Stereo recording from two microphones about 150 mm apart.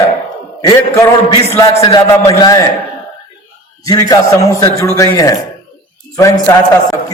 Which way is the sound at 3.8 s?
25° left (ahead or behind).